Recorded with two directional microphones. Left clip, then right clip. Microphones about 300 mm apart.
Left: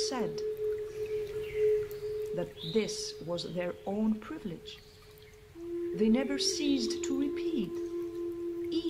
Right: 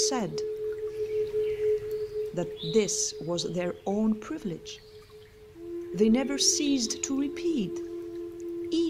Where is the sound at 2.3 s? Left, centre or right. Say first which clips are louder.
Right 8 dB; right.